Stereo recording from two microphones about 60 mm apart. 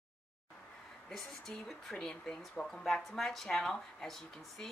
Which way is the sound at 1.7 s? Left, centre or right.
Centre.